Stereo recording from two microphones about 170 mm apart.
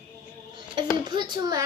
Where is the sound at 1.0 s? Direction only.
25° right (ahead or behind).